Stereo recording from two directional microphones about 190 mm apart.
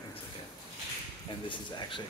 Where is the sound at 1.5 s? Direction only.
25° left (ahead or behind).